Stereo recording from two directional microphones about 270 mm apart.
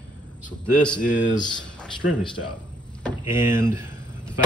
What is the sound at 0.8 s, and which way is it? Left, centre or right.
Speech, centre.